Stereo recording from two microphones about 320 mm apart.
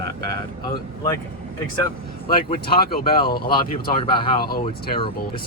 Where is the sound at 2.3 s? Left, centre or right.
Centre.